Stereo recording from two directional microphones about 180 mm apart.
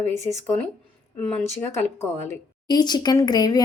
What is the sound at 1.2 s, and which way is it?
Speech, 10° left (ahead or behind).